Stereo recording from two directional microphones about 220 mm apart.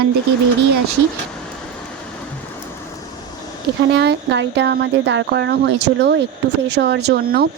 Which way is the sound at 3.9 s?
50° right (ahead or behind).